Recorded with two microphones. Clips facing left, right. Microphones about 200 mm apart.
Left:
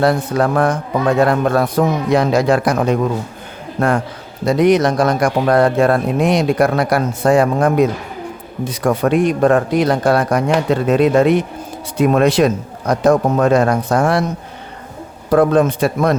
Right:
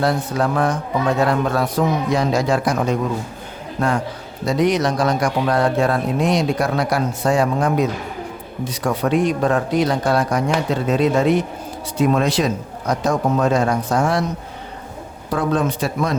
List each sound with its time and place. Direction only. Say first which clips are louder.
0.0 s speech: left 4 dB; 55° left (ahead or behind)
15.3 s speech: left 7 dB; 55° left (ahead or behind)